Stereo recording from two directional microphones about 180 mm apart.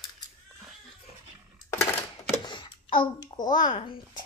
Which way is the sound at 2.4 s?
25° left (ahead or behind).